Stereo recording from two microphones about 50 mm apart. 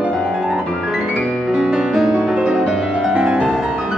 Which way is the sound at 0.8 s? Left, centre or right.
Centre.